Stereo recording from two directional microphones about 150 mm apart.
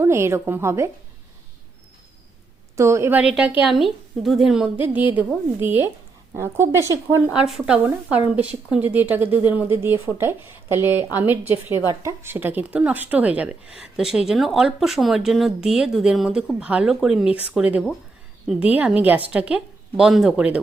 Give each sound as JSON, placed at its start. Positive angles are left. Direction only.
{"t": 0.0, "sound": "a woman's voice", "side_deg": -15}
{"t": 2.7, "sound": "a woman's voice", "side_deg": -20}
{"t": 7.3, "sound": "a woman's voice", "side_deg": -5}